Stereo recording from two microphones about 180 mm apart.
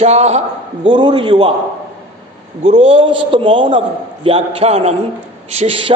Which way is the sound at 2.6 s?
30° right (ahead or behind).